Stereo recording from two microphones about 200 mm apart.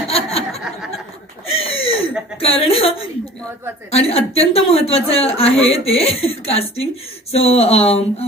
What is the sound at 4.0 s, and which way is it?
A woman's voice, 30° left (ahead or behind).